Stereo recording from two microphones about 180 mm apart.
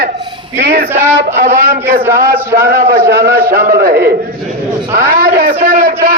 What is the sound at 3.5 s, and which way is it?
A man's voice, 55° right (ahead or behind).